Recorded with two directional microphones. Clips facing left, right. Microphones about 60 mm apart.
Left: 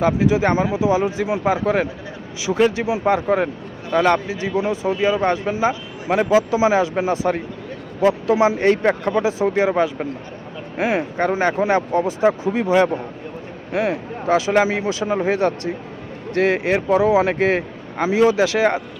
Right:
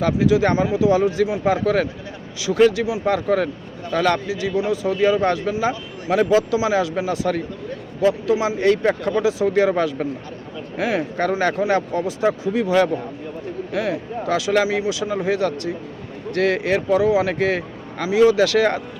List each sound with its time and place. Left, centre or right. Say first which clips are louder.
0.0 s speech: even; left
8.0 s speech: left 3 dB; left